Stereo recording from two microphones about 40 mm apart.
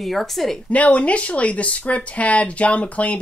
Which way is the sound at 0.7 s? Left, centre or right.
Left.